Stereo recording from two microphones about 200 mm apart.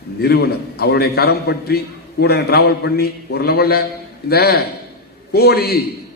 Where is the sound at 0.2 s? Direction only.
50° left (ahead or behind).